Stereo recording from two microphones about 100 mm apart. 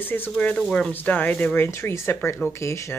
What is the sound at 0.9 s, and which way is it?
Speech, 15° left (ahead or behind).